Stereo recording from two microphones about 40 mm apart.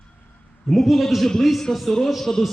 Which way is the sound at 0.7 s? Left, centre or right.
Centre.